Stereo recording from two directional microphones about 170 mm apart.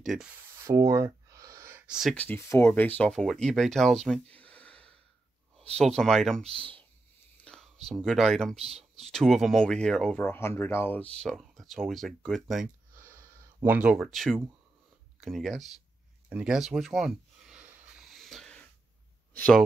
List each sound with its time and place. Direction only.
0.0 s speech: centre (ahead or behind)
0.7 s a sound: 20° right (ahead or behind)
1.9 s speech: centre (ahead or behind)
2.1 s speech: 10° left (ahead or behind)
6.4 s speech: 35° right (ahead or behind)
7.4 s speech: 5° left (ahead or behind)
8.5 s speech: 35° right (ahead or behind)
9.0 s speech: centre (ahead or behind)
12.9 s a sound: 15° right (ahead or behind); by 14.4 s centre (ahead or behind)
15.1 s speech: centre (ahead or behind)
16.3 s a sound: 5° right (ahead or behind)
19.3 s speech: 5° left (ahead or behind)